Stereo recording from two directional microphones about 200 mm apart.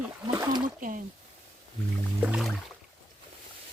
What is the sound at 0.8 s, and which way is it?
Speech, 45° right (ahead or behind).